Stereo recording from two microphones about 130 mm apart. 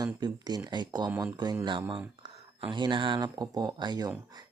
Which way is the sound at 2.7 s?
35° right (ahead or behind).